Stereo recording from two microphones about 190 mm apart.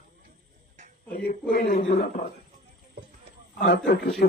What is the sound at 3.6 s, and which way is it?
Speech, 60° left (ahead or behind).